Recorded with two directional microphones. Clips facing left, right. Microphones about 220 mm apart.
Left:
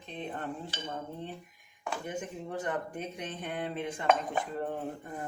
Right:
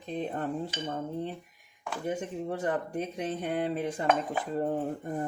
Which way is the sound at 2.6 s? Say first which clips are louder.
Right 4 dB; 35° right (ahead or behind).